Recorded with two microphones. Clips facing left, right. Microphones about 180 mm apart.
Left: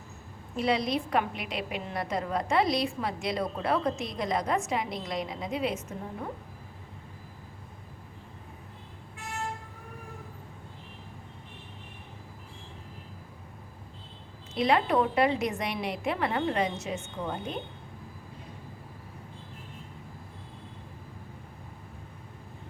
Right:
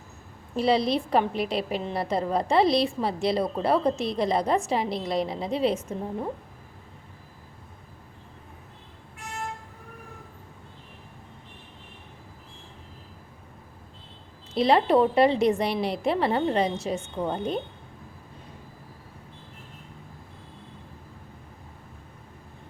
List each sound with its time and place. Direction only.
0.5 s a woman's voice: 30° right (ahead or behind)
14.5 s a woman's voice: 35° right (ahead or behind)